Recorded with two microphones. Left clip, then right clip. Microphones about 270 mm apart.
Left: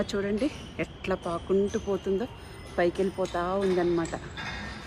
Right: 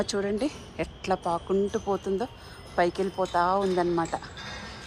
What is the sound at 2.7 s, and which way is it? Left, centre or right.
A woman's voice, centre.